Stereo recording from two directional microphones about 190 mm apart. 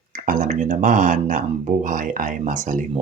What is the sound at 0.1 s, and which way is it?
Speech, 45° right (ahead or behind).